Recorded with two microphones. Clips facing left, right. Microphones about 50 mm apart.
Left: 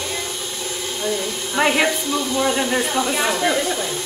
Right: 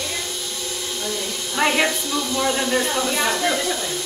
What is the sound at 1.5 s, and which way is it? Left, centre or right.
A woman's voice, centre.